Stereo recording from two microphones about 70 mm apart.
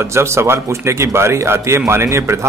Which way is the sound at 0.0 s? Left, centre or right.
Right.